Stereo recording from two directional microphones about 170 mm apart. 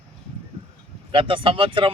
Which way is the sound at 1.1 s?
30° right (ahead or behind).